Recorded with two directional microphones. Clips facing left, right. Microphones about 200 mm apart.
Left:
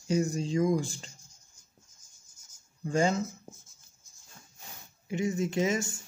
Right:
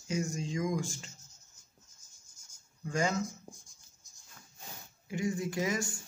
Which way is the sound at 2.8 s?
30° left (ahead or behind).